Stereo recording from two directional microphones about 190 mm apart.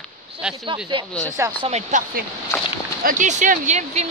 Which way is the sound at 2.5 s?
10° left (ahead or behind).